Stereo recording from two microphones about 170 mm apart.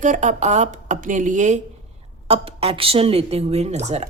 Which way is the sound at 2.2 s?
35° right (ahead or behind).